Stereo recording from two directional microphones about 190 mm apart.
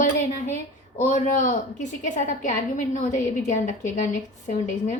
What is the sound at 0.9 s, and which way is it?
A woman's voice, 40° left (ahead or behind).